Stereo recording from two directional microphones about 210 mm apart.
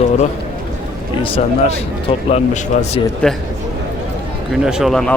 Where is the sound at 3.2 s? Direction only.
5° left (ahead or behind).